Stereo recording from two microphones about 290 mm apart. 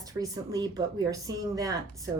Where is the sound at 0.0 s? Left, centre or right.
Centre.